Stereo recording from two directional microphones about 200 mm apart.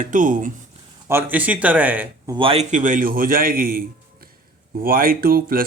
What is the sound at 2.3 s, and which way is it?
Speech, 25° right (ahead or behind).